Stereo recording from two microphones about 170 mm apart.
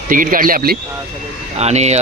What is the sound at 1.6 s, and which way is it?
Speech, 40° right (ahead or behind).